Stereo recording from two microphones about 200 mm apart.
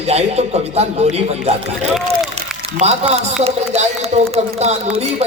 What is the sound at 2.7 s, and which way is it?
A man's voice, 35° right (ahead or behind).